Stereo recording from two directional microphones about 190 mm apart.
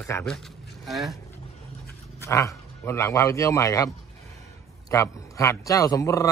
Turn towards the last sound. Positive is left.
turn(degrees=15)  # may be behind; listen again after turning